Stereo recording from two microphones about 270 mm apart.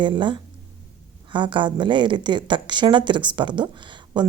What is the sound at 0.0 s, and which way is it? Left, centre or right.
A woman's voice, centre.